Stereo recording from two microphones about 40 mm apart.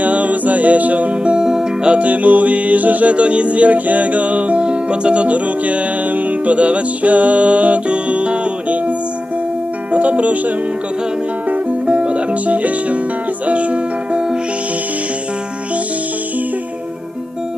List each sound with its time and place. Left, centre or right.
0.0 s music: right; by 1.9 s centre
1.9 s music: right
9.9 s speech: right
11.4 s music: right
11.9 s music: right